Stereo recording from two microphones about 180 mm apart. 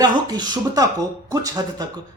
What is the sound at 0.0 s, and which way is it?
Speech, 25° right (ahead or behind).